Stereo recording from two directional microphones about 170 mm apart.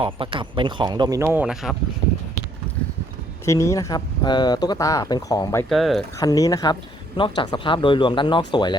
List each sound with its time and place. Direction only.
0.0 s speech: 30° right (ahead or behind); by 1.7 s 5° right (ahead or behind)
3.4 s speech: 15° left (ahead or behind)
5.6 s speech: centre (ahead or behind)
6.1 s speech: 20° left (ahead or behind)